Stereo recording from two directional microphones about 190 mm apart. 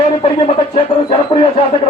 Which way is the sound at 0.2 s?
30° left (ahead or behind).